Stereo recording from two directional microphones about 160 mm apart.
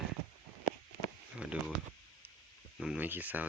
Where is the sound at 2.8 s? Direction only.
5° right (ahead or behind).